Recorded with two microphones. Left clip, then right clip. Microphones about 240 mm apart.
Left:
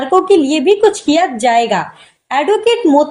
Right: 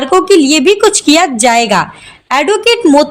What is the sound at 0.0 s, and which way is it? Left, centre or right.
A woman's voice, right.